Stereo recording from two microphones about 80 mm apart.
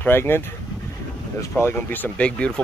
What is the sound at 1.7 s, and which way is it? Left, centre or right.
Speech, left.